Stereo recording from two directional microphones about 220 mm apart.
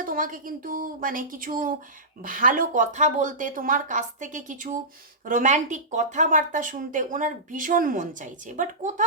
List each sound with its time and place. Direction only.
0.0 s speech: 40° right (ahead or behind)